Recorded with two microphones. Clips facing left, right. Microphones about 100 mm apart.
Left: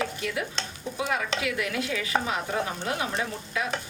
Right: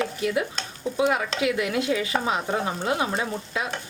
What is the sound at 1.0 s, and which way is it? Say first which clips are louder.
A woman's voice: right 5 dB; 25° right (ahead or behind).